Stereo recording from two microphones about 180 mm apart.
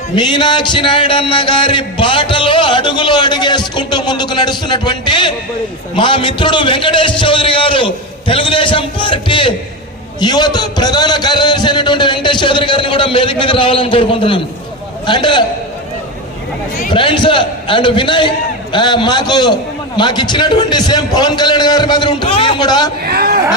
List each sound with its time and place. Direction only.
0.2 s music: 25° left (ahead or behind)
16.9 s music: 25° left (ahead or behind)
23.0 s speech: 55° right (ahead or behind)